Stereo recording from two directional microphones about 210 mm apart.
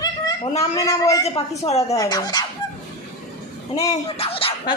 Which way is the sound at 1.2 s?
30° left (ahead or behind).